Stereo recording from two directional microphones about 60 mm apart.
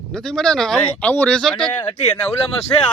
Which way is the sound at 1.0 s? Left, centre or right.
Left.